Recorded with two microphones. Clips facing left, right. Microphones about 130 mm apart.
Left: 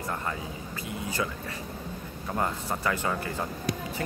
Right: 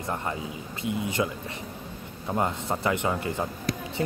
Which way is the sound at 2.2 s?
20° right (ahead or behind).